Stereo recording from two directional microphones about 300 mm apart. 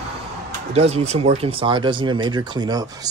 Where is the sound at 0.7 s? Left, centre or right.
Right.